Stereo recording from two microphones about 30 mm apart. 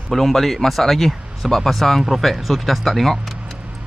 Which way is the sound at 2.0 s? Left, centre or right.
Centre.